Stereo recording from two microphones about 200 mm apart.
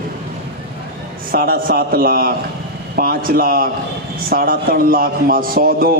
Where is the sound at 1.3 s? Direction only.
45° right (ahead or behind).